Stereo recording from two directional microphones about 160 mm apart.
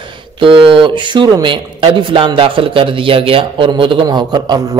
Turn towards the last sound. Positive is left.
turn(degrees=-25)  # may be behind; listen again after turning